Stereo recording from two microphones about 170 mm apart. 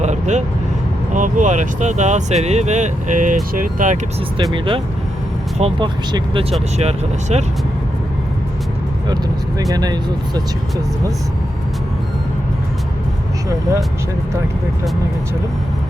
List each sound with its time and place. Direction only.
0.0 s vehicle: 45° right (ahead or behind)
1.1 s speech: 45° right (ahead or behind)
4.5 s speech: 30° right (ahead or behind)
9.7 s speech: 25° right (ahead or behind)